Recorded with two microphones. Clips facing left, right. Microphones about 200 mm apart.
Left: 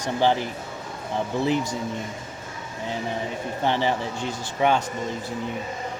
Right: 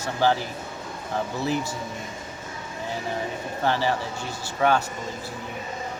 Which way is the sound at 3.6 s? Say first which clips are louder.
Left 1 dB; 20° left (ahead or behind).